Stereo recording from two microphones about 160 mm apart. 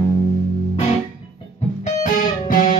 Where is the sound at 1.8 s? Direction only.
55° left (ahead or behind).